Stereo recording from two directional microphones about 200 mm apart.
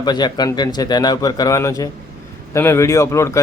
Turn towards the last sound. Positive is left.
turn(degrees=15)  # may be behind; listen again after turning